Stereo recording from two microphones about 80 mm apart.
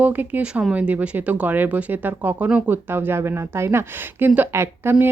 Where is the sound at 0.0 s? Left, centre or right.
Right.